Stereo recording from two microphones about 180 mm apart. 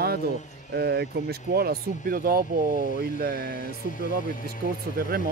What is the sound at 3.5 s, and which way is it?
Speech, 50° left (ahead or behind).